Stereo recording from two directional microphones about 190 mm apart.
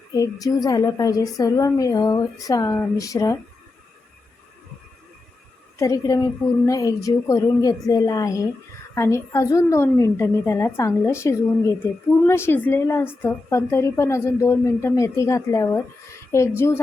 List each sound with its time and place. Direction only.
0.1 s a woman's voice: 20° left (ahead or behind)
5.8 s a woman's voice: 20° left (ahead or behind)